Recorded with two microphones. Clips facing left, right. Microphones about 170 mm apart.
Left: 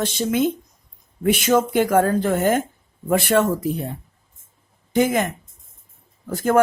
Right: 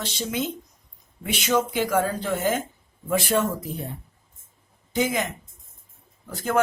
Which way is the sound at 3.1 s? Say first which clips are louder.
Left 5 dB; 70° left (ahead or behind).